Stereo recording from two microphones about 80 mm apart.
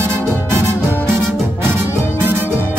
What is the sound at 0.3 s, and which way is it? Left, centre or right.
Music, right.